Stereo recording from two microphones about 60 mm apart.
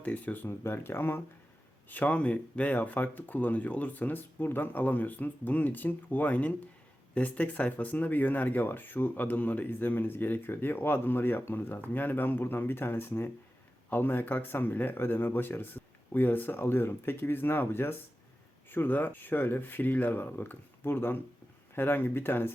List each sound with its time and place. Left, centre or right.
0.0 s speech: left
0.4 s speech: left
1.9 s speech: left